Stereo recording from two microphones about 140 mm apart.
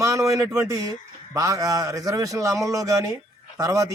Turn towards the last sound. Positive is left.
turn(degrees=-25)  # may be behind; listen again after turning